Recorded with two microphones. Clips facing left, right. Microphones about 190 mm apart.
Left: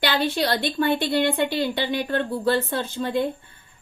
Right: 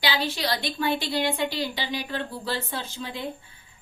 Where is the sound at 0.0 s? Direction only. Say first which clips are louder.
Left 5 dB; 60° left (ahead or behind).